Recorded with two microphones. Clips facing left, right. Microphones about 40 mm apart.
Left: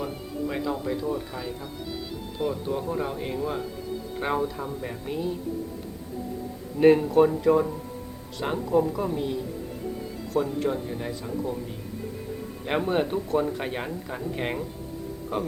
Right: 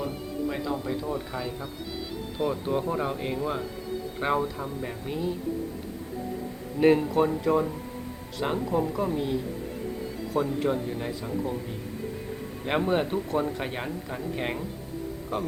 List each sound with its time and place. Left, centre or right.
0.0 s speech: centre
2.5 s speech: centre
6.7 s speech: centre
12.6 s speech: centre